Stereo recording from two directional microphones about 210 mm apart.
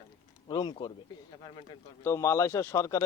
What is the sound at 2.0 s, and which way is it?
A man's voice, 15° left (ahead or behind).